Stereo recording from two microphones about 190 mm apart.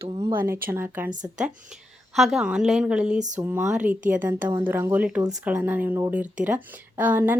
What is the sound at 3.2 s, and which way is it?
Speech, 40° right (ahead or behind).